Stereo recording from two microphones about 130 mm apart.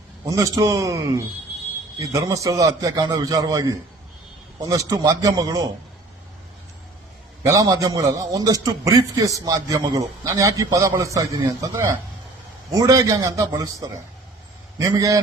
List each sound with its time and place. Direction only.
0.3 s a man's voice: 25° right (ahead or behind)
7.4 s a man's voice: 25° right (ahead or behind)